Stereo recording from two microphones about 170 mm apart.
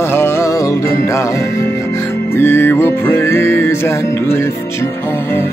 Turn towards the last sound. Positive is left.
turn(degrees=15)  # may be behind; listen again after turning